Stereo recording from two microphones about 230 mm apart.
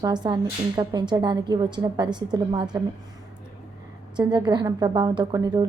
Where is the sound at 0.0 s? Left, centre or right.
Centre.